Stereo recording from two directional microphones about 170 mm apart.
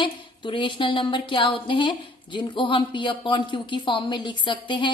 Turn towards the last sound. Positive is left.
turn(degrees=30)  # may be behind; listen again after turning